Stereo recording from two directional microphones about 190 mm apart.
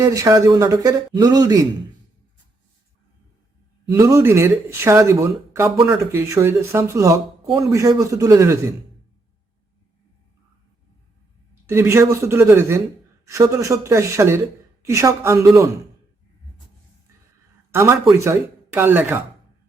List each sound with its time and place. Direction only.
0.0 s speech: 15° right (ahead or behind)
3.9 s speech: 15° right (ahead or behind)
11.6 s speech: 15° right (ahead or behind)
18.2 s speech: 15° right (ahead or behind)